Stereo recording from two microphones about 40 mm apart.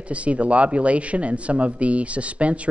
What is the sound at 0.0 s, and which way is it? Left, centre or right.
Speech, right.